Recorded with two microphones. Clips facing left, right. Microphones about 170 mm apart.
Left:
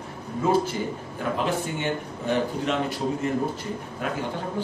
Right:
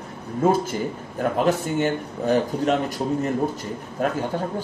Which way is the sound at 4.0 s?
45° right (ahead or behind).